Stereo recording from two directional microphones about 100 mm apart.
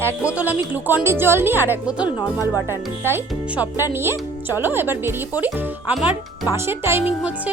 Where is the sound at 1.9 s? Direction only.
10° right (ahead or behind).